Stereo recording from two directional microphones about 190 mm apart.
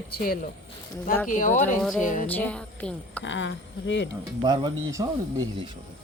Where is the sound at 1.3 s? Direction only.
40° left (ahead or behind).